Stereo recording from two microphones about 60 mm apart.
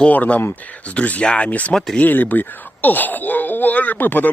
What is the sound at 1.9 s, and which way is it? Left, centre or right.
Speech, left.